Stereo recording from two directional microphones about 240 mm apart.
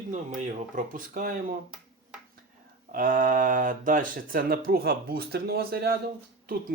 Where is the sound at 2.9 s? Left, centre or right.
Right.